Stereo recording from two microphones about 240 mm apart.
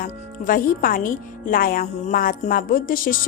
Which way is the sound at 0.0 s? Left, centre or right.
Left.